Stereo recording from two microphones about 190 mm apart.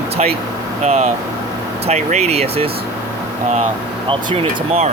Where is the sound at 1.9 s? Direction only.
35° right (ahead or behind).